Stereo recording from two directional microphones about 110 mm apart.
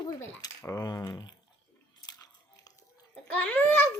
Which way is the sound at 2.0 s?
35° left (ahead or behind).